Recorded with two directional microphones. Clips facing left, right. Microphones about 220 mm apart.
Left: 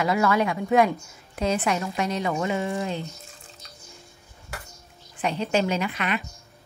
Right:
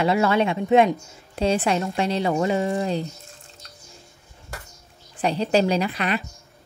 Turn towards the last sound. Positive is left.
turn(degrees=-35)  # may be behind; listen again after turning